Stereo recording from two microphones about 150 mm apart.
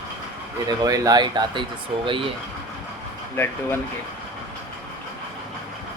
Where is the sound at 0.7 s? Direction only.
25° right (ahead or behind).